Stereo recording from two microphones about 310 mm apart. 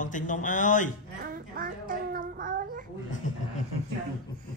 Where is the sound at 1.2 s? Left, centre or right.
Right.